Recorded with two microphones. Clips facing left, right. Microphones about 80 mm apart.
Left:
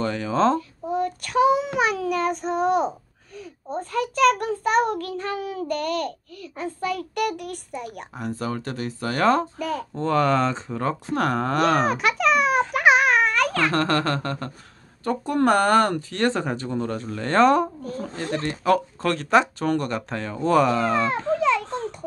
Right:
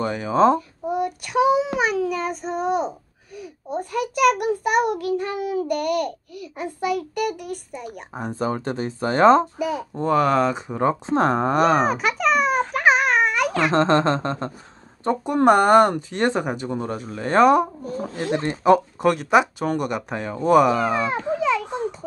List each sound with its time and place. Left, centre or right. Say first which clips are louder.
0.0 s a child's voice: right 3 dB; centre
3.7 s speech: right 1 dB; centre
7.2 s a child's voice: even; centre
8.1 s speech: right 4 dB; right
9.6 s speech: right 2 dB; centre
11.6 s a sound: even; centre
13.5 s speech: right 4 dB; centre